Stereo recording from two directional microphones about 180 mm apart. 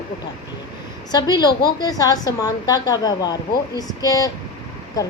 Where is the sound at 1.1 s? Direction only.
25° left (ahead or behind).